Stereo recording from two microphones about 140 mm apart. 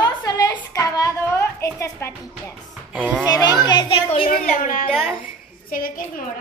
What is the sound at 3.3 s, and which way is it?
Speech, 25° left (ahead or behind).